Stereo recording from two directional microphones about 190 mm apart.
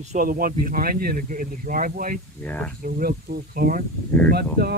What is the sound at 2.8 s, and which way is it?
Speech, 55° right (ahead or behind).